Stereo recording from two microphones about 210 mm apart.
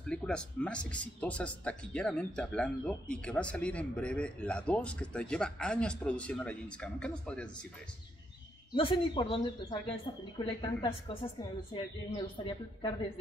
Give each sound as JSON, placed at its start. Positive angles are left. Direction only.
{"t": 0.0, "sound": "speech", "side_deg": 5}
{"t": 8.7, "sound": "speech", "side_deg": 25}